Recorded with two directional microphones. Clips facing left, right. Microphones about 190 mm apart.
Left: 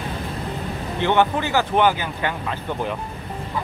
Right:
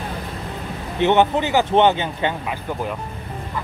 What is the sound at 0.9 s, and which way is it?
Speech, 20° right (ahead or behind).